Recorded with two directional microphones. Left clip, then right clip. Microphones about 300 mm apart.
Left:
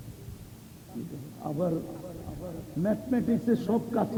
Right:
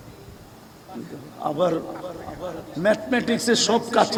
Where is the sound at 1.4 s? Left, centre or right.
Centre.